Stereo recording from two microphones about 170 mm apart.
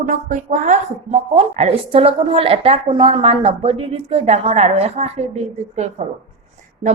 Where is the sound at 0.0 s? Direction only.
50° right (ahead or behind).